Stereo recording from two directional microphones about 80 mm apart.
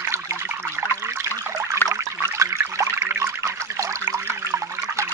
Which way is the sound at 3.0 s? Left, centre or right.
Right.